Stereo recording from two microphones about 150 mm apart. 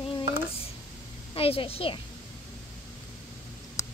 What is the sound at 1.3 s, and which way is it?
Speech, 40° left (ahead or behind).